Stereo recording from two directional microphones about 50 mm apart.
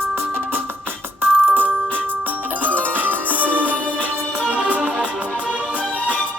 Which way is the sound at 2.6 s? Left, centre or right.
Right.